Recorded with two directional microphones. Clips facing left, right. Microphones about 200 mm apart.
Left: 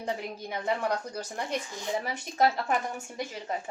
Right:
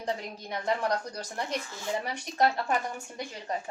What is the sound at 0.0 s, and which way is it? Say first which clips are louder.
A woman's voice: even; 5° left (ahead or behind).